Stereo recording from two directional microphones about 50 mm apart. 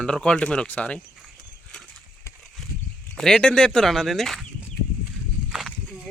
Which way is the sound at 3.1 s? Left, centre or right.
Centre.